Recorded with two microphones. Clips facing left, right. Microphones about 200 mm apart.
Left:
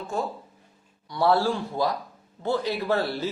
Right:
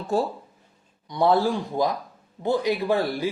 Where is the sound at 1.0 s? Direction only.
20° right (ahead or behind).